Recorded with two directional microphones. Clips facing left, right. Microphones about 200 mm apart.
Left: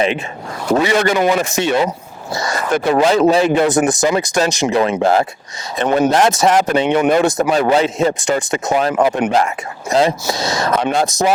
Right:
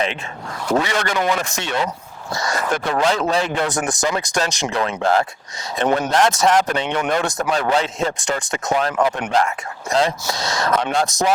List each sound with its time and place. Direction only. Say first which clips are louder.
0.7 s speech: left 6 dB; 5° left (ahead or behind)